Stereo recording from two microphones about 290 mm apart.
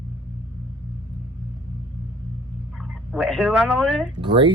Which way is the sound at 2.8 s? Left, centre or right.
Centre.